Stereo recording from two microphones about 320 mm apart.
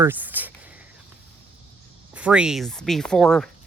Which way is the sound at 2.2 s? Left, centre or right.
Centre.